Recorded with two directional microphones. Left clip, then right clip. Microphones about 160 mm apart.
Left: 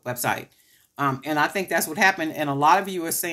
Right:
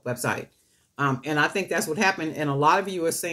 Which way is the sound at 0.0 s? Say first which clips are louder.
Left 2 dB; 35° left (ahead or behind).